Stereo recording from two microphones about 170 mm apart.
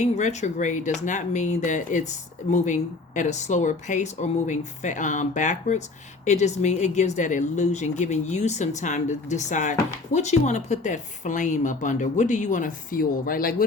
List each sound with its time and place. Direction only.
0.0 s speech: 45° left (ahead or behind)